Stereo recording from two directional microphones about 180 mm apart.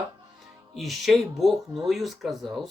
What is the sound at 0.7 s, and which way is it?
Speech, centre (ahead or behind).